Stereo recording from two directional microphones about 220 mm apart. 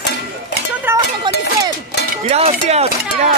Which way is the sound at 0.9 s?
20° right (ahead or behind).